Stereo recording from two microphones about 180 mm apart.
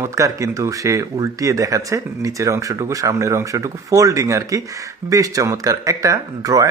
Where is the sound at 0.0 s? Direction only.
15° right (ahead or behind).